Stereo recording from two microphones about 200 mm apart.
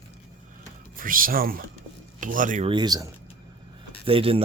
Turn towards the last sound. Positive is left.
turn(degrees=-25)  # may be behind; listen again after turning